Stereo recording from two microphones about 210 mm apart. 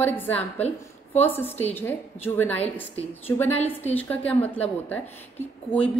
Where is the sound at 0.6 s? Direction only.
30° left (ahead or behind).